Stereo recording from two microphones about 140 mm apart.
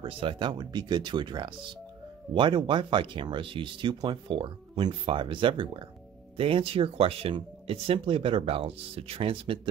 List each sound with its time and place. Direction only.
0.0 s speech: 40° right (ahead or behind)